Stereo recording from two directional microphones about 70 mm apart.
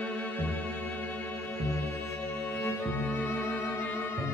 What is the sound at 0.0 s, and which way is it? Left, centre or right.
Music, centre.